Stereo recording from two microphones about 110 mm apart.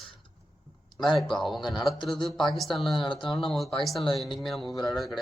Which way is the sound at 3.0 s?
45° left (ahead or behind).